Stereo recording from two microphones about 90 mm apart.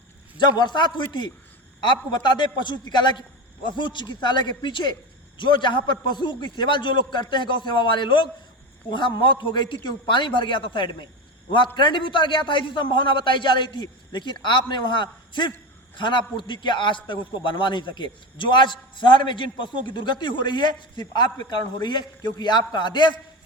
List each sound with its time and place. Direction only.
0.3 s a man's voice: 55° left (ahead or behind)